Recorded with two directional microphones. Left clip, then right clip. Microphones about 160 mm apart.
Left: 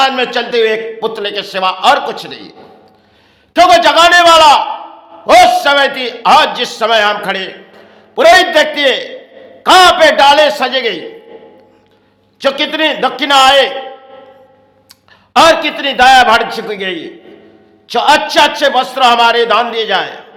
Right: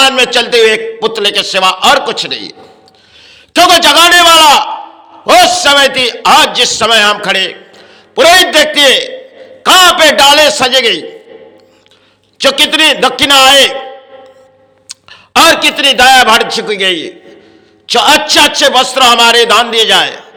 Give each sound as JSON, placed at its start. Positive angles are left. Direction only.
{"t": 0.2, "sound": "a man's voice", "side_deg": -10}
{"t": 12.4, "sound": "a man's voice", "side_deg": -15}
{"t": 14.8, "sound": "a man's voice", "side_deg": -20}